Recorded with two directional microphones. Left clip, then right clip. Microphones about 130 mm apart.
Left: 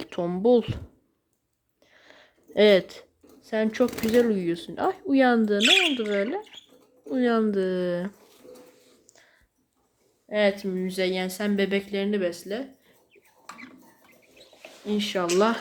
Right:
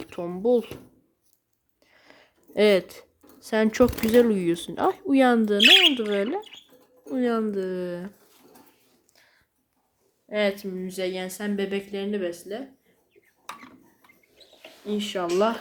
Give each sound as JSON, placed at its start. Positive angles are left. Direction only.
{"t": 0.0, "sound": "speech", "side_deg": 5}
{"t": 1.8, "sound": "a sound", "side_deg": -10}
{"t": 3.4, "sound": "speech", "side_deg": -30}
{"t": 5.6, "sound": "speech", "side_deg": -60}
{"t": 5.9, "sound": "speech", "side_deg": -15}
{"t": 7.1, "sound": "a woman's voice", "side_deg": -5}
{"t": 9.1, "sound": "whispering", "side_deg": 0}
{"t": 10.2, "sound": "a woman's voice", "side_deg": 0}
{"t": 14.8, "sound": "a woman's voice", "side_deg": 15}